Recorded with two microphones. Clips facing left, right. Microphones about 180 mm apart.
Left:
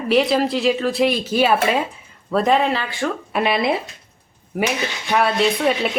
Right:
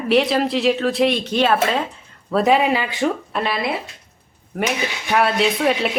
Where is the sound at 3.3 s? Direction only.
20° left (ahead or behind).